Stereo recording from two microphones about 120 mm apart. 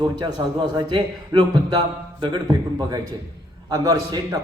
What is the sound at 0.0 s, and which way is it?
A man's voice, 35° right (ahead or behind).